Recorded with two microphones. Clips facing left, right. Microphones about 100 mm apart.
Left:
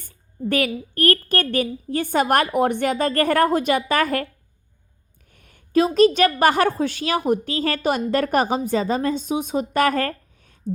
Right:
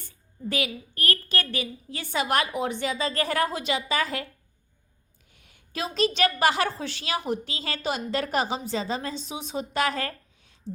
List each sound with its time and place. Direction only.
0.0 s a woman's voice: 55° left (ahead or behind)
5.3 s a woman's voice: 50° left (ahead or behind)